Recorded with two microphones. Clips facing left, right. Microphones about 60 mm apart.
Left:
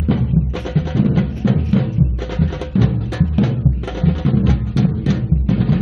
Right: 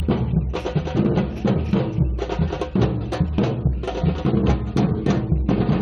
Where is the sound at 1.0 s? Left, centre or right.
Centre.